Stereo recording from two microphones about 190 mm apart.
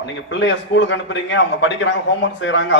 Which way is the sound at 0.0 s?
75° left (ahead or behind).